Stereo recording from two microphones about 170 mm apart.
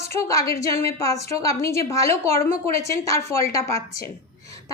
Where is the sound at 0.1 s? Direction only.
15° left (ahead or behind).